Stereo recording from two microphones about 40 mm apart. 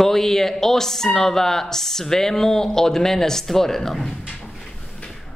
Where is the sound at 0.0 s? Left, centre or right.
Centre.